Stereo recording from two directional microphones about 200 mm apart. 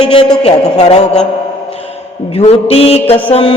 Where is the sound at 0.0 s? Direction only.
25° left (ahead or behind).